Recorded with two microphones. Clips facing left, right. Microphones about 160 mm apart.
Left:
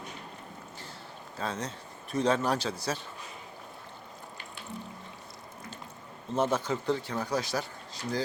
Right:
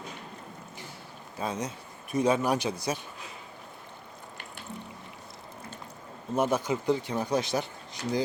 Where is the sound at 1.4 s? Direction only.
15° right (ahead or behind).